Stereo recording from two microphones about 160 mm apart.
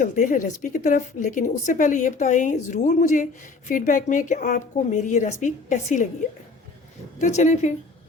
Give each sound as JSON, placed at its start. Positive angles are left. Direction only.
{"t": 0.0, "sound": "speech", "side_deg": 55}
{"t": 7.2, "sound": "speech", "side_deg": 45}